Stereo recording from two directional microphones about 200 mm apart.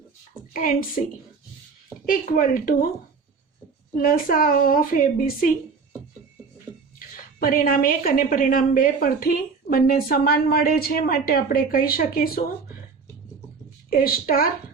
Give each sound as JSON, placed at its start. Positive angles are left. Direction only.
{"t": 0.5, "sound": "a woman's voice", "side_deg": 45}
{"t": 2.0, "sound": "a woman's voice", "side_deg": 45}
{"t": 4.0, "sound": "a woman's voice", "side_deg": 45}
{"t": 7.0, "sound": "a woman's voice", "side_deg": 45}
{"t": 13.9, "sound": "a woman's voice", "side_deg": 45}